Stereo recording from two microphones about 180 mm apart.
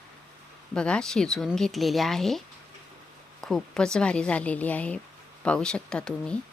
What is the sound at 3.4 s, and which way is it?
A woman's voice, 5° left (ahead or behind).